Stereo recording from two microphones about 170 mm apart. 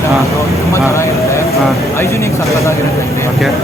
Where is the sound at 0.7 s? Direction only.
15° left (ahead or behind).